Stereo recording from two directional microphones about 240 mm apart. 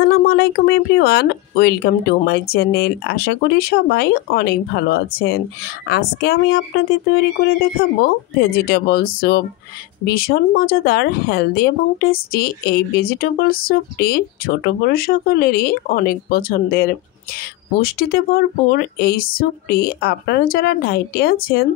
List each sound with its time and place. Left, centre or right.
0.0 s speech: left
8.4 s speech: left